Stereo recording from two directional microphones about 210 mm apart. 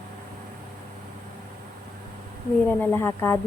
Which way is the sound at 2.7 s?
10° left (ahead or behind).